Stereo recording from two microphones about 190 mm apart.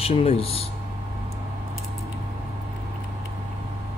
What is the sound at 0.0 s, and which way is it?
Speech, 30° left (ahead or behind).